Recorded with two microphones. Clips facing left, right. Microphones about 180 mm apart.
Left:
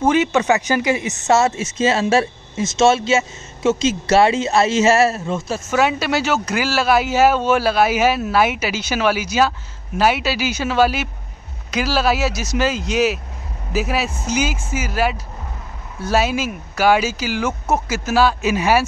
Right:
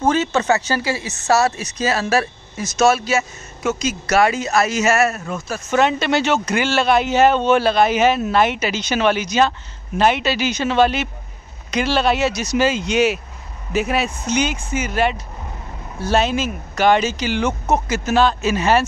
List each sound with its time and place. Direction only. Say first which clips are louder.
0.1 s speech: left 2 dB; 15° left (ahead or behind)
5.7 s speech: right 1 dB; 5° left (ahead or behind)